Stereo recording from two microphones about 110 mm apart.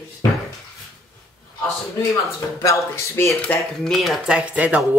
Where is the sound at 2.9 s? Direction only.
25° left (ahead or behind).